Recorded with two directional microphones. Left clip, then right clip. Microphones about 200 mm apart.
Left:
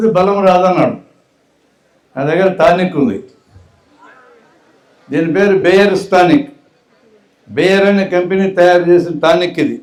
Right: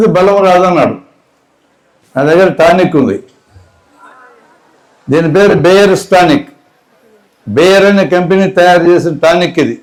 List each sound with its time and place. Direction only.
0.1 s a man's voice: 40° right (ahead or behind)
2.1 s a man's voice: 35° right (ahead or behind)
5.1 s a man's voice: 35° right (ahead or behind)
7.5 s a man's voice: 35° right (ahead or behind)